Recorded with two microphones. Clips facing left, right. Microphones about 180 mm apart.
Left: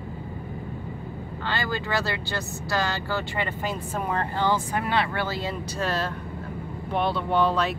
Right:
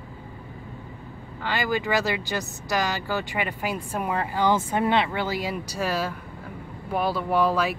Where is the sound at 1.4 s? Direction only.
15° right (ahead or behind).